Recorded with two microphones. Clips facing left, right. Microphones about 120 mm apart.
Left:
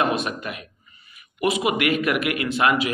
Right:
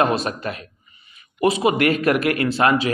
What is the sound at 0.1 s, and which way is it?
A man's voice, 35° right (ahead or behind).